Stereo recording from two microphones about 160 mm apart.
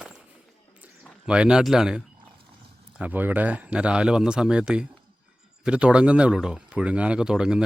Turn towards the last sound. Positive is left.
turn(degrees=-5)  # may be behind; listen again after turning